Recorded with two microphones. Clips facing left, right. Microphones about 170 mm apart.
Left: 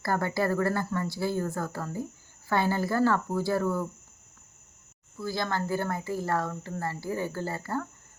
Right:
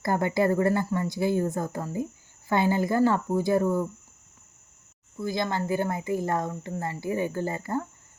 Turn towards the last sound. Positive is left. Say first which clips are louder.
# right 3 dB
turn(degrees=-20)  # may be behind; listen again after turning